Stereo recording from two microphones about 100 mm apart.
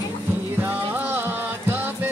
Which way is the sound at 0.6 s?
20° right (ahead or behind).